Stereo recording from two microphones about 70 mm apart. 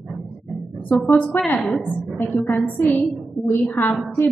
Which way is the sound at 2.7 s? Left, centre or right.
Left.